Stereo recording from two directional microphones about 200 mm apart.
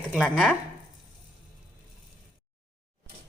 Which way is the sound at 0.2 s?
5° left (ahead or behind).